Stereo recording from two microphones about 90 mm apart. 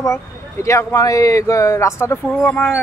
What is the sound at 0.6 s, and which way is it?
Speech, 40° left (ahead or behind).